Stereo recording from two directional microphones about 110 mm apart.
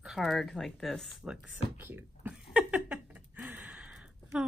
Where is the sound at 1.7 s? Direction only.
20° right (ahead or behind).